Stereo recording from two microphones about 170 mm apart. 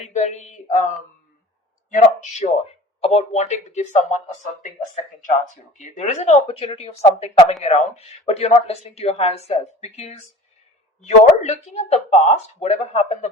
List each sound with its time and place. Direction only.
0.0 s a woman's voice: 45° left (ahead or behind)